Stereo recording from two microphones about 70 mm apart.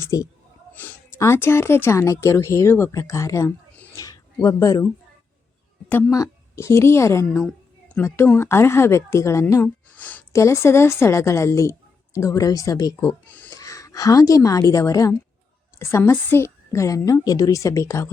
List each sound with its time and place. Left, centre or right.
0.1 s speech: left
0.7 s a sound: left
1.2 s a woman's voice: left
3.9 s a sound: left
4.4 s a woman's voice: left
6.1 s a woman's voice: left
7.4 s a sound: centre
8.0 s speech: left
9.9 s a sound: left
10.3 s a woman's voice: left
13.0 s speech: left
13.5 s a woman's voice: left
15.8 s a woman's voice: left